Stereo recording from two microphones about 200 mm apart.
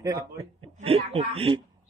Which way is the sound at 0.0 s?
20° right (ahead or behind).